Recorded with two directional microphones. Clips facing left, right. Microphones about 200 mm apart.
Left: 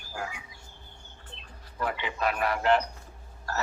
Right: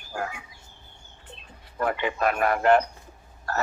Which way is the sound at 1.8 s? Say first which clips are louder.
Right 5 dB; 50° right (ahead or behind).